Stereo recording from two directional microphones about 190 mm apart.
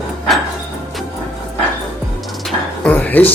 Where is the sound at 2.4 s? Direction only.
5° left (ahead or behind).